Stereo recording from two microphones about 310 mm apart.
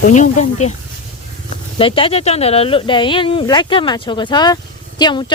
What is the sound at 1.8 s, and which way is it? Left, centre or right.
Speech, centre.